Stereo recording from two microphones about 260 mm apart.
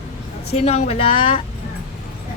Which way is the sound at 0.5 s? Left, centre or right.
Left.